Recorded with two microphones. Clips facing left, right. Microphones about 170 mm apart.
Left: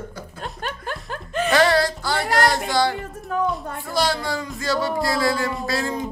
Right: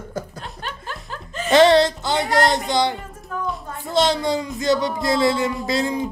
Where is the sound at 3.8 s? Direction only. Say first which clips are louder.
Right 5 dB; 20° right (ahead or behind).